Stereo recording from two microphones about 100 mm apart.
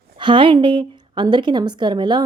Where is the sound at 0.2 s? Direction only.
55° right (ahead or behind).